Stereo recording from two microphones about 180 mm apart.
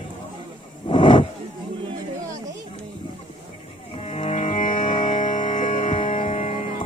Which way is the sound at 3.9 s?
35° left (ahead or behind).